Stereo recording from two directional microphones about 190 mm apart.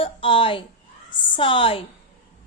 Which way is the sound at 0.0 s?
30° left (ahead or behind).